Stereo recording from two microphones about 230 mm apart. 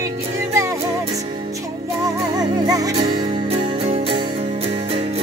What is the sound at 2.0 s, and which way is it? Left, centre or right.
Music, centre.